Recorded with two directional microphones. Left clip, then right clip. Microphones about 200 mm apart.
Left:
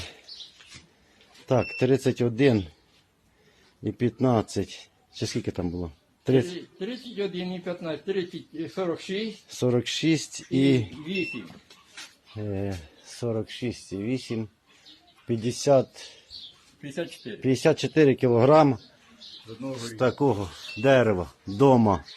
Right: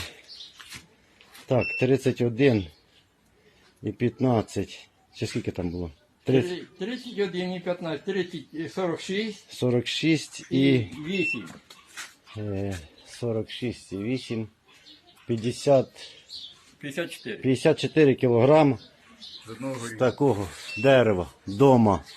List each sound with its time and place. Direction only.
1.6 s speech: 10° left (ahead or behind)
3.8 s speech: 15° left (ahead or behind)
6.5 s a man's voice: 45° right (ahead or behind)
9.5 s speech: 10° left (ahead or behind)
12.4 s speech: 5° left (ahead or behind)
16.8 s speech: 20° left (ahead or behind)
17.4 s speech: 5° left (ahead or behind)